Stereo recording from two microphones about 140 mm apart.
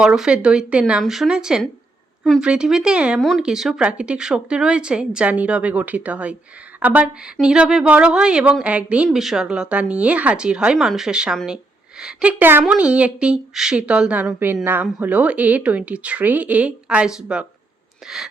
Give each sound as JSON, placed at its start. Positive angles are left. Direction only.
{"t": 0.0, "sound": "speech", "side_deg": -5}